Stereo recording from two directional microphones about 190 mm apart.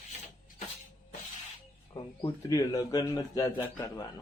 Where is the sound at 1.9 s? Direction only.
20° left (ahead or behind).